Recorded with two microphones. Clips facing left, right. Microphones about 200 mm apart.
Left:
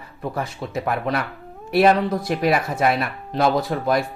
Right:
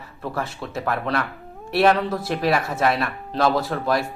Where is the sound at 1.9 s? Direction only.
15° left (ahead or behind).